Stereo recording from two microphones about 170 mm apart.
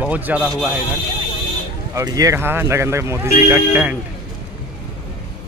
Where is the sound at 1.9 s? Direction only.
20° right (ahead or behind).